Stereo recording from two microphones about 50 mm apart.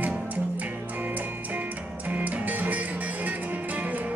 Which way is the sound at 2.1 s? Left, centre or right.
Right.